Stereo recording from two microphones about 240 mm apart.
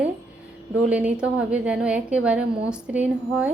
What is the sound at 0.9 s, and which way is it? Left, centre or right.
A woman's voice, centre.